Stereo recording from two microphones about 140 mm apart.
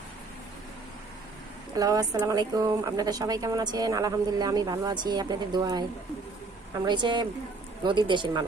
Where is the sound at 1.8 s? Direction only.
25° right (ahead or behind).